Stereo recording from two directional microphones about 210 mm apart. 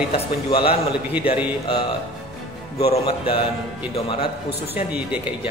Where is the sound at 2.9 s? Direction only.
25° left (ahead or behind).